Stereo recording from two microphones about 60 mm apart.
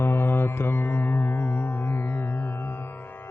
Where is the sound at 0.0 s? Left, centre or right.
Left.